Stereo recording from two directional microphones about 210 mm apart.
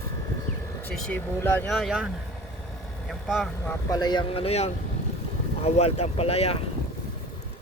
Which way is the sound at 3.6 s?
20° left (ahead or behind).